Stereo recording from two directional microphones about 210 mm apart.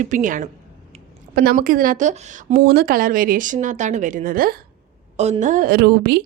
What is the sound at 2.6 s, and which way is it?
A woman's voice, 50° right (ahead or behind).